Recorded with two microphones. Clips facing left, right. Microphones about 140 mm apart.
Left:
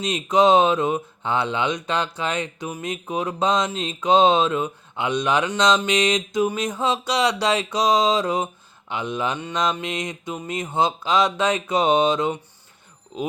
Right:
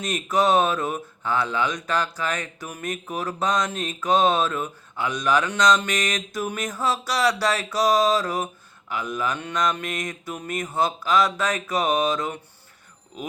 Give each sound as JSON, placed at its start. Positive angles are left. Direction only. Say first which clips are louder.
{"t": 0.1, "sound": "speech", "louder": "left 4 dB", "side_deg": 20}